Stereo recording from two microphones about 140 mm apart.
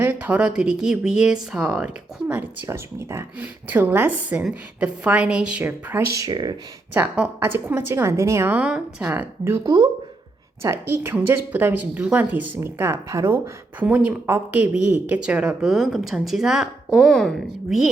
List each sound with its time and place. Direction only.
0.0 s speech: 10° right (ahead or behind); by 6.6 s 30° right (ahead or behind)
6.9 s speech: 15° right (ahead or behind)
10.6 s speech: 20° right (ahead or behind); by 17.9 s centre (ahead or behind)